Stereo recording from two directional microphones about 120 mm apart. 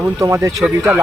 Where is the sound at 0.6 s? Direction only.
10° right (ahead or behind).